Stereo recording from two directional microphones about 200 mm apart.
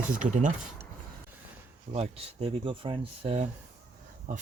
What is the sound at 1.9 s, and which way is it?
Speech, 30° right (ahead or behind).